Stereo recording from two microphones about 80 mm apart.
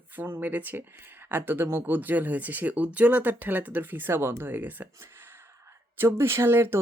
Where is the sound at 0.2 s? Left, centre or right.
Right.